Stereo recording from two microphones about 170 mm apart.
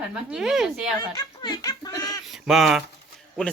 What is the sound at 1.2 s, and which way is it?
Laughter, 20° left (ahead or behind).